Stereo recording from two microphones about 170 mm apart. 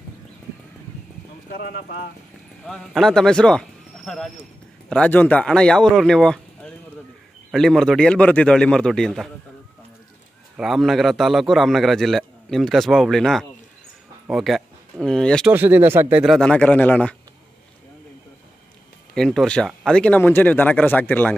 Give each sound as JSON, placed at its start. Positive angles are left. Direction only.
{"t": 1.5, "sound": "speech", "side_deg": 60}
{"t": 2.6, "sound": "a man's voice", "side_deg": 0}
{"t": 10.6, "sound": "a man's voice", "side_deg": 0}
{"t": 15.5, "sound": "speech", "side_deg": -10}
{"t": 16.3, "sound": "speech", "side_deg": 5}
{"t": 19.1, "sound": "speech", "side_deg": 5}